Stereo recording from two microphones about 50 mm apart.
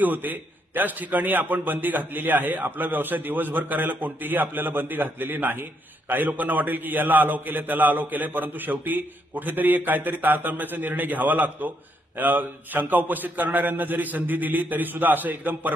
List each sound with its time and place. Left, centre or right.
0.0 s a man's voice: right